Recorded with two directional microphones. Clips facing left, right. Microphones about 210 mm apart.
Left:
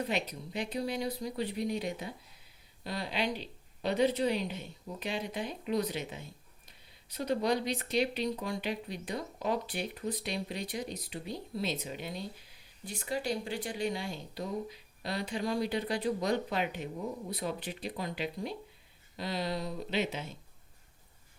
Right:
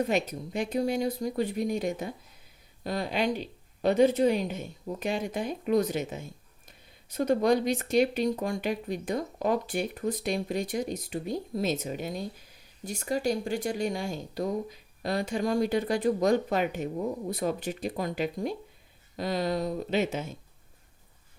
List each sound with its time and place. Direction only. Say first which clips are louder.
0.0 s a woman's voice: right 6 dB; 45° right (ahead or behind)